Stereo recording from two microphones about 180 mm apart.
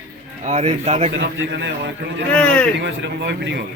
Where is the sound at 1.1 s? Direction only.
90° right.